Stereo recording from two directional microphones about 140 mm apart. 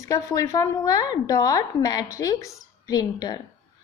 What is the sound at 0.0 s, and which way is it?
Speech, 25° left (ahead or behind).